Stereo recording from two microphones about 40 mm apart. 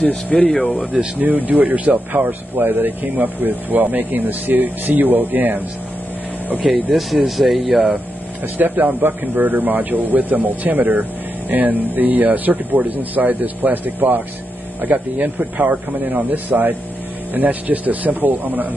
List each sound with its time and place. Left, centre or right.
0.0 s speech: left
1.1 s speech: right
6.7 s speech: centre
8.5 s speech: right